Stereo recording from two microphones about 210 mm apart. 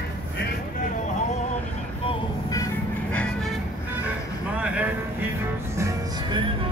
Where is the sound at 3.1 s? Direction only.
5° left (ahead or behind).